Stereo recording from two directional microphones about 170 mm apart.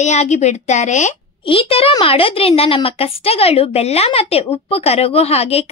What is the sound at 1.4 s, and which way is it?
A woman's voice, 30° left (ahead or behind).